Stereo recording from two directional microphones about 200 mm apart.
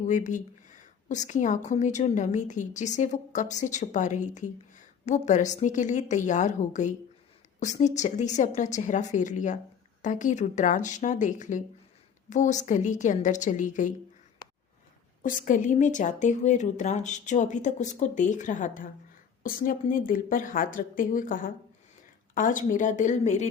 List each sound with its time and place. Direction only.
0.0 s speech: 35° left (ahead or behind)
15.2 s a woman's voice: 40° left (ahead or behind)